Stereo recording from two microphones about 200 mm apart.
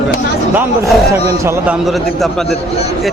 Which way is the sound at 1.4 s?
15° right (ahead or behind).